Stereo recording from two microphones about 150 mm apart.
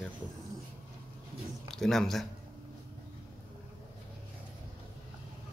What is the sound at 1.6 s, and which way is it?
Speech, 5° left (ahead or behind).